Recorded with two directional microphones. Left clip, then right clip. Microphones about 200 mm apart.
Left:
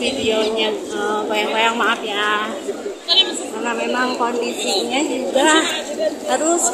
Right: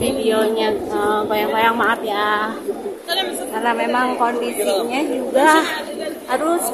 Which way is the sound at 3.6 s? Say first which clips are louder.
Right 2 dB; 5° right (ahead or behind).